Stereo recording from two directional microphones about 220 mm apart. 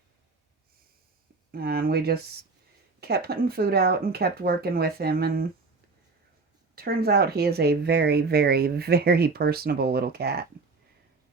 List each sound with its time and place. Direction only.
1.5 s speech: 45° right (ahead or behind)
6.7 s speech: 45° right (ahead or behind)